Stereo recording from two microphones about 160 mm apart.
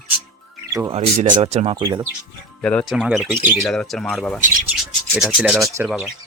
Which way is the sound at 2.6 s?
5° left (ahead or behind).